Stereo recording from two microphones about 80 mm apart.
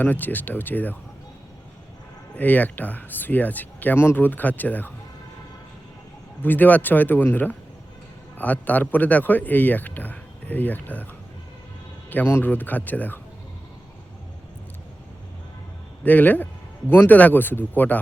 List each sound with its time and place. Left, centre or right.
0.0 s speech: left
2.3 s speech: left
6.4 s speech: left
12.1 s speech: left
16.0 s speech: left